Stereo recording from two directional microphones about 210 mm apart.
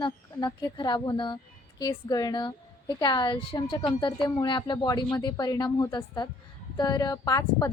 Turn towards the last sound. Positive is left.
turn(degrees=15)  # may be behind; listen again after turning